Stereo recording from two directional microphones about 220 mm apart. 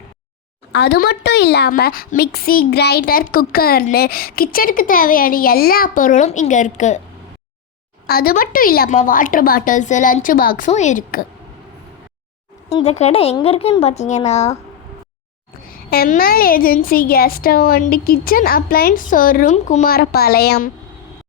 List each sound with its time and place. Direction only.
0.7 s a woman's voice: 50° left (ahead or behind)
8.0 s a woman's voice: 45° left (ahead or behind)
12.6 s a woman's voice: 30° left (ahead or behind)
15.6 s a woman's voice: 40° left (ahead or behind)